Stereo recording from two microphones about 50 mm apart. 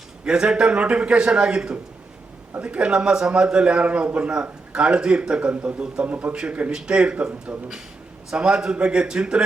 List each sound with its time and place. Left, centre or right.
0.3 s a man's voice: centre